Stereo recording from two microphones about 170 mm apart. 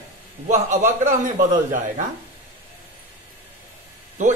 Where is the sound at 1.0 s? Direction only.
50° right (ahead or behind).